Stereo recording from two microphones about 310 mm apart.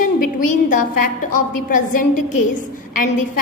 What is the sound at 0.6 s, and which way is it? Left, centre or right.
A woman's voice, left.